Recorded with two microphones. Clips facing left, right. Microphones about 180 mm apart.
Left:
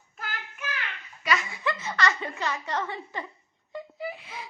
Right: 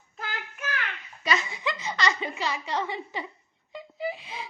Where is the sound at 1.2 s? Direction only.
25° right (ahead or behind).